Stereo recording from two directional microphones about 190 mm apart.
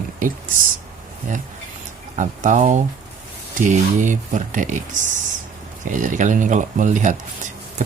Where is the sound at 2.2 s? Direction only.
40° right (ahead or behind).